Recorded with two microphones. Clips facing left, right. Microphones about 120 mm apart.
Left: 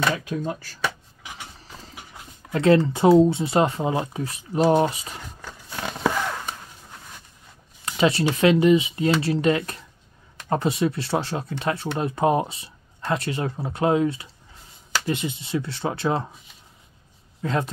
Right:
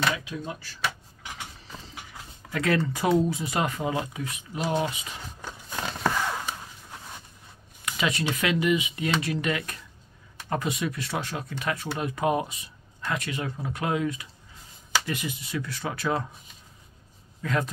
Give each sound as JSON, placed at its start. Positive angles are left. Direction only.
{"t": 0.1, "sound": "speech", "side_deg": 45}
{"t": 2.5, "sound": "speech", "side_deg": 30}
{"t": 7.8, "sound": "speech", "side_deg": 35}
{"t": 17.4, "sound": "speech", "side_deg": 30}